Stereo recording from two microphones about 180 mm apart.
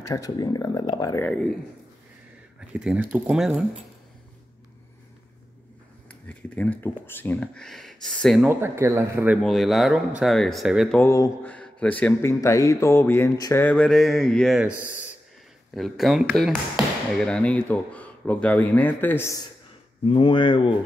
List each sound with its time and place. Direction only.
0.0 s speech: 20° left (ahead or behind)
2.7 s speech: 5° right (ahead or behind)
6.0 s speech: 5° left (ahead or behind)
8.5 s speech: 15° right (ahead or behind)
9.4 s speech: centre (ahead or behind)
11.0 s speech: 15° left (ahead or behind)
11.4 s speech: 5° left (ahead or behind)
20.1 s speech: 30° left (ahead or behind)